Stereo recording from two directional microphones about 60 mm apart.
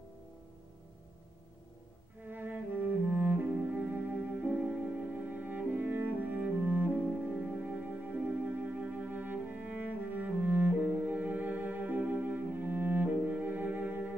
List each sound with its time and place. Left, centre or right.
2.2 s cello: right
3.9 s music: centre
5.3 s cello: right